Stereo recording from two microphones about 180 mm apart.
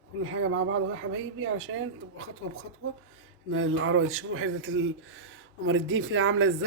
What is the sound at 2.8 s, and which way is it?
Speech, 90° right.